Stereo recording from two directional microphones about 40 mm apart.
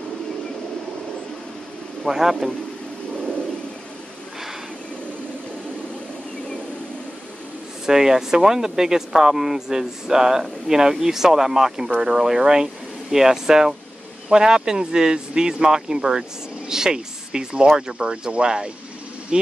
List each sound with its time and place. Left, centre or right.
2.0 s speech: centre
7.8 s speech: centre